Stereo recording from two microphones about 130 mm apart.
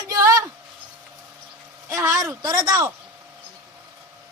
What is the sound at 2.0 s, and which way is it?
Speech, 20° right (ahead or behind).